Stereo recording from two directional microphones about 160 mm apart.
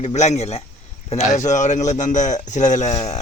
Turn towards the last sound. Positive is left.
turn(degrees=25)  # may be behind; listen again after turning